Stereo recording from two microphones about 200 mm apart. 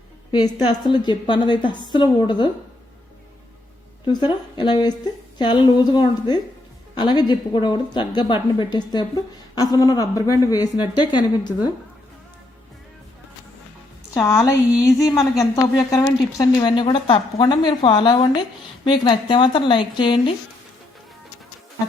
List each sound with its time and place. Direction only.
0.3 s a woman's voice: 20° left (ahead or behind)
4.0 s a woman's voice: 25° left (ahead or behind)
14.1 s a woman's voice: 15° left (ahead or behind)